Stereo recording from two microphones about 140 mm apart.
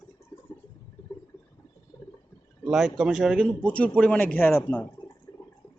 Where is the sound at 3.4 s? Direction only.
5° left (ahead or behind).